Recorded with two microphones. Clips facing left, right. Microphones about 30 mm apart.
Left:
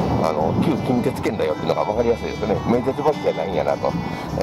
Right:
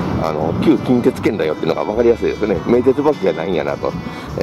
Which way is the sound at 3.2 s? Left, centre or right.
Right.